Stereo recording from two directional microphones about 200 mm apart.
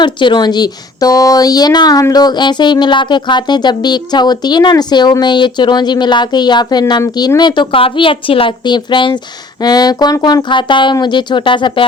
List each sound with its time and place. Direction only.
0.0 s speech: 25° left (ahead or behind)